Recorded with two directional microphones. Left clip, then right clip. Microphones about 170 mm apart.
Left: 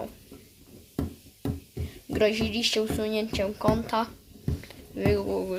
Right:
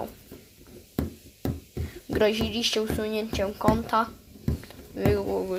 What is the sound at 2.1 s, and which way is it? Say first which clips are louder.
A woman's voice: right 1 dB; centre (ahead or behind).